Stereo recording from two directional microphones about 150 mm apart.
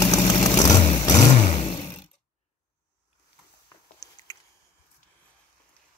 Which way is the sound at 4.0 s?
25° left (ahead or behind).